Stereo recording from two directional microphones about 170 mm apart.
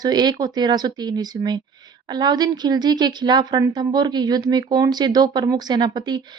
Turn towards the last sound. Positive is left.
turn(degrees=-25)  # may be behind; listen again after turning